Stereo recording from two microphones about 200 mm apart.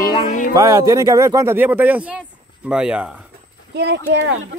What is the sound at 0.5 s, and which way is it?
Speech, 15° right (ahead or behind).